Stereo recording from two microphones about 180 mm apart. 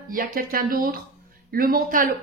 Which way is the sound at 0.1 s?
50° right (ahead or behind).